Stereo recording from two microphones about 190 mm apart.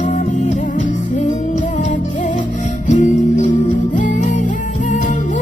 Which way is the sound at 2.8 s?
40° left (ahead or behind).